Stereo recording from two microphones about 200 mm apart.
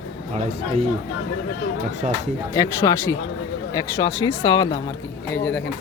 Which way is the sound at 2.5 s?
15° left (ahead or behind).